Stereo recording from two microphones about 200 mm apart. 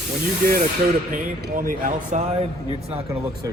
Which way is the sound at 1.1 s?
45° right (ahead or behind).